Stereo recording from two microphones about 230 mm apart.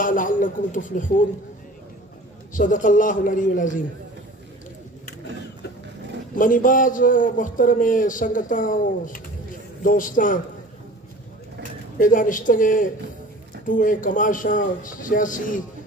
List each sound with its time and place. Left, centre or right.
0.0 s a man's voice: left
2.5 s a man's voice: left
6.3 s a man's voice: left
12.0 s a man's voice: left